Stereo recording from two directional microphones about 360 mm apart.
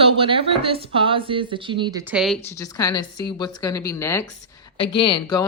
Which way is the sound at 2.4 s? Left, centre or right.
Centre.